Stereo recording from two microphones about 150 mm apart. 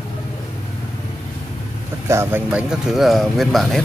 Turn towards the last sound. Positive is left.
turn(degrees=0)  # may be behind; listen again after turning